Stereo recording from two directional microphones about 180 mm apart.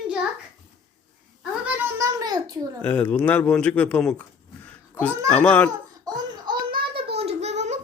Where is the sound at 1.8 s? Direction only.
15° right (ahead or behind).